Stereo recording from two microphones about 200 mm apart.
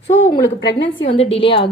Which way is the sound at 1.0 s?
30° left (ahead or behind).